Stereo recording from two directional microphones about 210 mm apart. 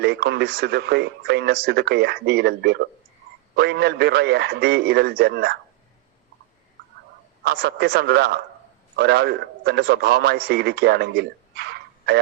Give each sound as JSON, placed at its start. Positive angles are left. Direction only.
{"t": 0.0, "sound": "a man's voice", "side_deg": -50}
{"t": 7.4, "sound": "a man's voice", "side_deg": -50}